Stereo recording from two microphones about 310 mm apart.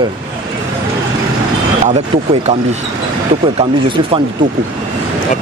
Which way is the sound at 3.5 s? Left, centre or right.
Centre.